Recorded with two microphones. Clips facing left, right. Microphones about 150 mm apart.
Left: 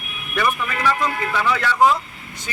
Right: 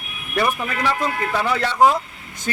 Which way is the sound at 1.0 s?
40° right (ahead or behind).